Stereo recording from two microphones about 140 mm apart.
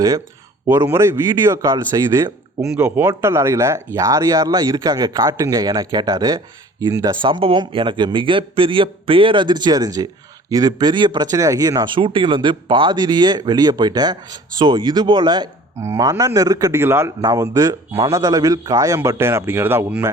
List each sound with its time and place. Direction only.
0.7 s speech: 15° right (ahead or behind)
2.6 s speech: 5° right (ahead or behind); by 15.4 s 30° right (ahead or behind)
15.8 s speech: 20° right (ahead or behind)